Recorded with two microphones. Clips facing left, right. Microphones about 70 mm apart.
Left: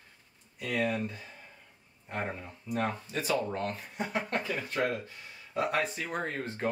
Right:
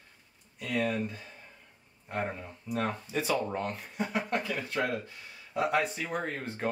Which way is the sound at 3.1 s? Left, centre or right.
Centre.